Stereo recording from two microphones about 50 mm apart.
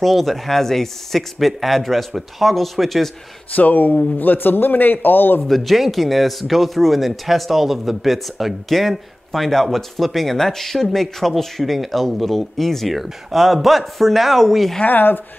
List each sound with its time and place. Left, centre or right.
0.0 s speech: centre
3.5 s a man's voice: left
5.4 s speech: centre
14.9 s a man's voice: left